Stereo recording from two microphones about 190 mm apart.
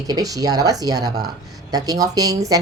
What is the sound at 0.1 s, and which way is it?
A woman's voice, 20° right (ahead or behind).